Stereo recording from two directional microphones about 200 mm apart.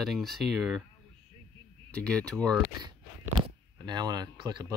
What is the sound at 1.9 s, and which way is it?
Speech, 5° left (ahead or behind).